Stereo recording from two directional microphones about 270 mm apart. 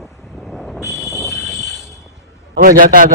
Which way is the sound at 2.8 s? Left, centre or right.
Right.